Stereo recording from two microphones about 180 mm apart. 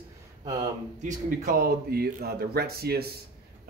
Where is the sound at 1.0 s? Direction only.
50° right (ahead or behind).